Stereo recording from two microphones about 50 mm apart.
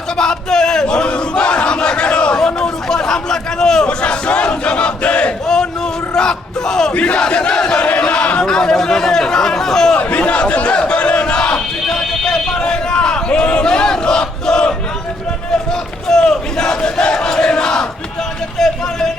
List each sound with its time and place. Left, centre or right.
0.2 s battle cry: centre
4.0 s battle cry: left
6.1 s bellow: centre
6.9 s battle cry: left
7.9 s chatter: left
10.0 s battle cry: left
16.0 s battle cry: centre
18.6 s a sound: centre